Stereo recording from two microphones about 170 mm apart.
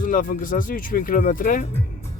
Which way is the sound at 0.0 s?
50° left (ahead or behind).